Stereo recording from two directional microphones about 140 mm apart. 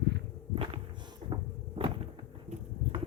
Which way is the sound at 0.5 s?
40° right (ahead or behind).